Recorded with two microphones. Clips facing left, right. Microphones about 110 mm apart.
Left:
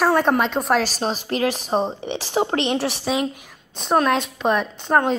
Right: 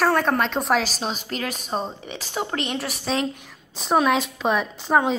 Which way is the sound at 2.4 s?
25° left (ahead or behind).